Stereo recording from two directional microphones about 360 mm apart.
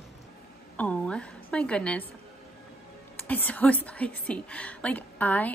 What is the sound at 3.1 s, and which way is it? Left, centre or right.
A woman's voice, centre.